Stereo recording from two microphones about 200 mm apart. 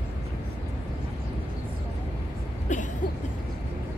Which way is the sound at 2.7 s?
35° left (ahead or behind).